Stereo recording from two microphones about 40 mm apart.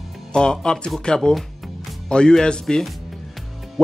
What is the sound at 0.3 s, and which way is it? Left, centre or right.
Speech, left.